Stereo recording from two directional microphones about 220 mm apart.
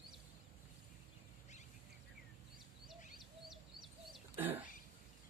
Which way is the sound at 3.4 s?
Centre (ahead or behind).